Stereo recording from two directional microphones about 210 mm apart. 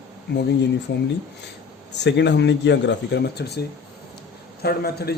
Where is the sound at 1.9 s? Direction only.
55° left (ahead or behind).